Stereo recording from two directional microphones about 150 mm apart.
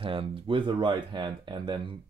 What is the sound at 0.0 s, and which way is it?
Speech, 35° right (ahead or behind).